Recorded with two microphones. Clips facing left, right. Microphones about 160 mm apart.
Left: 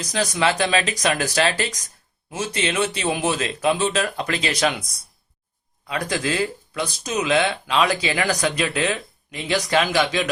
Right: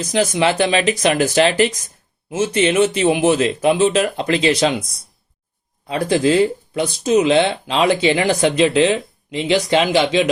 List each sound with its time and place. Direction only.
0.1 s speech: 25° right (ahead or behind)
5.9 s speech: 30° right (ahead or behind)